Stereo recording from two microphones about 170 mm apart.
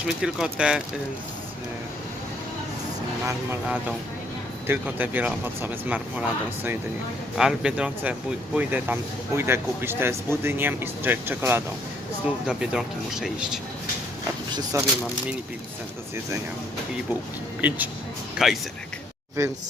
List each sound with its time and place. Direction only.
0.0 s speech: 5° right (ahead or behind)
3.2 s speech: 10° right (ahead or behind)
7.3 s speech: 5° right (ahead or behind)
14.5 s speech: 20° right (ahead or behind)
17.6 s speech: 10° right (ahead or behind)
19.4 s speech: 15° right (ahead or behind)